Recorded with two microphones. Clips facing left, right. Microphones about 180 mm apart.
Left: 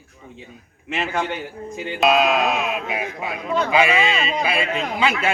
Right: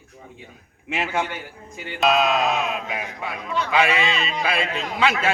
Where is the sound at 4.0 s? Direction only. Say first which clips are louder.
Left 3 dB; 45° left (ahead or behind).